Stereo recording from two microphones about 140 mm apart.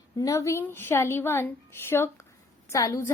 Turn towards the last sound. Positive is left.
turn(degrees=25)  # may be behind; listen again after turning